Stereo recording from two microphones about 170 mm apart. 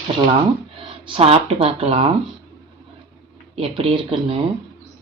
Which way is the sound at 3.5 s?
35° right (ahead or behind).